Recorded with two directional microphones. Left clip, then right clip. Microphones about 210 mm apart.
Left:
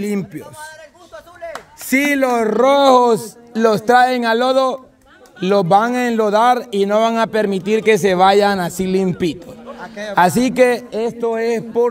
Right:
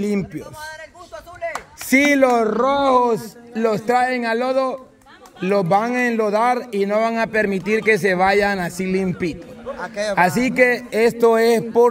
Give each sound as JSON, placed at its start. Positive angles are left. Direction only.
{"t": 0.0, "sound": "a man's voice", "side_deg": 10}
{"t": 1.1, "sound": "a sound", "side_deg": 0}
{"t": 2.4, "sound": "speech", "side_deg": 35}
{"t": 3.8, "sound": "a man's voice", "side_deg": 20}
{"t": 9.8, "sound": "a man's voice", "side_deg": -20}
{"t": 10.1, "sound": "a man's voice", "side_deg": 20}
{"t": 10.9, "sound": "a man's voice", "side_deg": -10}
{"t": 11.4, "sound": "speech", "side_deg": -5}